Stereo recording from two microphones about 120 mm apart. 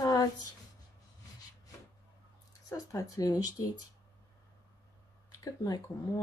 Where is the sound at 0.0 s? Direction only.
30° left (ahead or behind).